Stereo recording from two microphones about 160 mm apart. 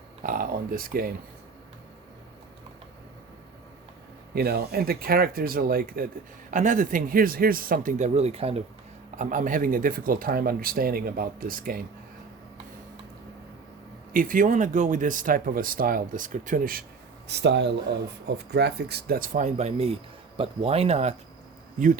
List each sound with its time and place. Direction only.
0.2 s a sound: 60° right (ahead or behind)
4.4 s speech: 75° right (ahead or behind)
6.5 s speech: 55° right (ahead or behind)
9.1 s speech: 55° right (ahead or behind)
14.1 s speech: 60° right (ahead or behind)
17.2 s speech: 90° right; by 19.5 s 60° right (ahead or behind)
19.5 s speech: 40° right (ahead or behind)